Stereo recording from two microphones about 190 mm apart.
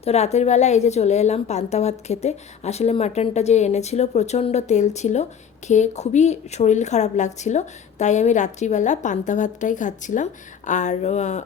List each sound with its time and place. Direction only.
0.0 s a woman's voice: 35° left (ahead or behind)